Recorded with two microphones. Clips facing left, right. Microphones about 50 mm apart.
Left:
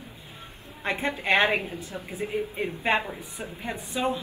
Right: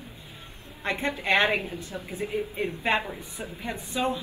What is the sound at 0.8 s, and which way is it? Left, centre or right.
Speech, centre.